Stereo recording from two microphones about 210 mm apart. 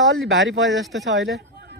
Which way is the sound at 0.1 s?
65° right (ahead or behind).